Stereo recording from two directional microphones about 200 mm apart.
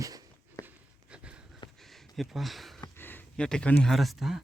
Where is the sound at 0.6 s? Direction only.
15° left (ahead or behind).